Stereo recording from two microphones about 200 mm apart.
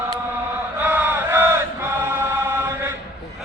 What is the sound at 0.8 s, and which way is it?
Battle cry, 10° right (ahead or behind).